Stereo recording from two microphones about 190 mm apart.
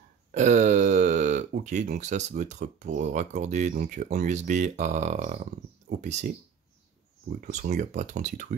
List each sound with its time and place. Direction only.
0.3 s speech: 40° right (ahead or behind)
7.3 s speech: 40° right (ahead or behind)